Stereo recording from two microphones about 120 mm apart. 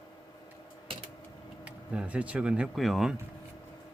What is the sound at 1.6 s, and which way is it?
Speech, 10° right (ahead or behind).